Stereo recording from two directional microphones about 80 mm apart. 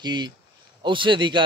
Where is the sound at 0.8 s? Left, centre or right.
Right.